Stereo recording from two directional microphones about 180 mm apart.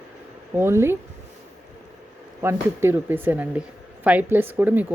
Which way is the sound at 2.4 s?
15° right (ahead or behind).